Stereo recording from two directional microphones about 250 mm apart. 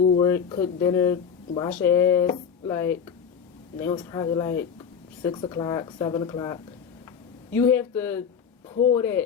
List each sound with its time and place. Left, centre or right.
0.2 s speech: centre
8.7 s speech: left
9.0 s speech: centre